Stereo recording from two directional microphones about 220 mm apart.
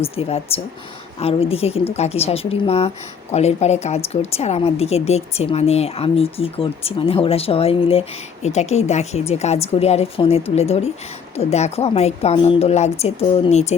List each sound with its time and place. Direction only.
0.0 s a woman's voice: 25° left (ahead or behind)